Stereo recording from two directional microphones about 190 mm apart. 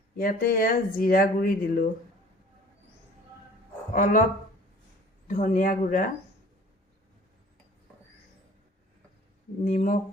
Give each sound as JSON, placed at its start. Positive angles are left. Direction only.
{"t": 0.2, "sound": "speech", "side_deg": 50}
{"t": 3.9, "sound": "speech", "side_deg": 45}
{"t": 5.3, "sound": "speech", "side_deg": 45}
{"t": 9.6, "sound": "speech", "side_deg": 45}